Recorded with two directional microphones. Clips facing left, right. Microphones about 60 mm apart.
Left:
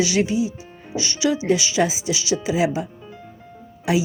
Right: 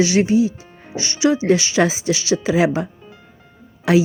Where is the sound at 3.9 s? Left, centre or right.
Right.